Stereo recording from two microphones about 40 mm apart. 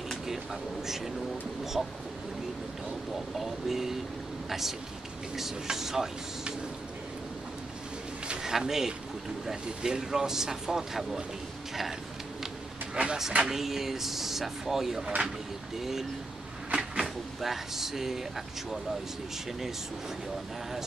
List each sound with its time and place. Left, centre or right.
0.3 s speech: centre
3.3 s speech: centre
8.4 s speech: centre
12.9 s a sound: right
13.4 s speech: centre
16.7 s cupboard open or close: centre
17.4 s speech: centre